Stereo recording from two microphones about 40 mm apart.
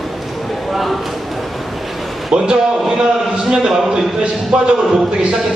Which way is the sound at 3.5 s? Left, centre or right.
Centre.